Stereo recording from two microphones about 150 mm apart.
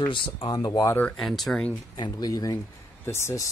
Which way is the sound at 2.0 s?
25° left (ahead or behind).